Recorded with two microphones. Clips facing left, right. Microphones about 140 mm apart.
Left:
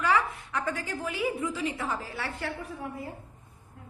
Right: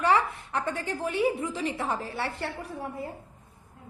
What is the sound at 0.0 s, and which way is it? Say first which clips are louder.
A woman's voice: right 2 dB; 30° right (ahead or behind).